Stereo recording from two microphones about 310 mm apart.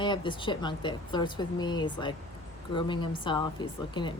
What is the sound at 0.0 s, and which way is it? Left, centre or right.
Speech, centre.